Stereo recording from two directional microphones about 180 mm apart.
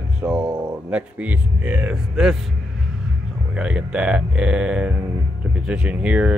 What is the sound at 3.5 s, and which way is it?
Speech, 5° right (ahead or behind).